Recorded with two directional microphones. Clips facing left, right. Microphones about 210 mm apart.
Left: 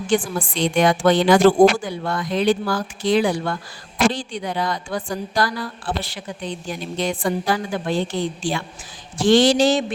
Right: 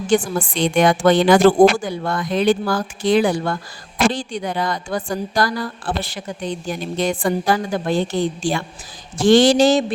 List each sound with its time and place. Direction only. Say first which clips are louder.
0.1 s a woman's voice: right 3 dB; 50° right (ahead or behind)